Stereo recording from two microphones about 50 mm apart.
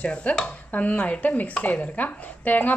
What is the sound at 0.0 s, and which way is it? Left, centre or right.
Speech, left.